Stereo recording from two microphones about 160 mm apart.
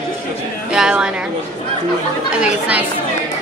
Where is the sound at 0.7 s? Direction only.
5° right (ahead or behind).